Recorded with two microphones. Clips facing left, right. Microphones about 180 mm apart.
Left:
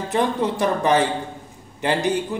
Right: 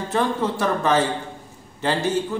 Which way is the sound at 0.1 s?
15° left (ahead or behind).